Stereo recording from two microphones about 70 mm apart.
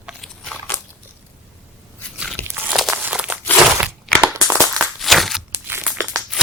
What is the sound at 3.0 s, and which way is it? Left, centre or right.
Crumpling, centre.